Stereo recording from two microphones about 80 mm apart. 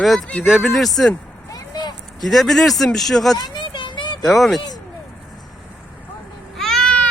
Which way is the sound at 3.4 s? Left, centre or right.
Left.